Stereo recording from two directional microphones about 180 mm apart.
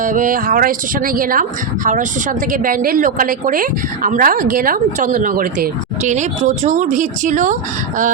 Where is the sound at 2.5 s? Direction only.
50° right (ahead or behind).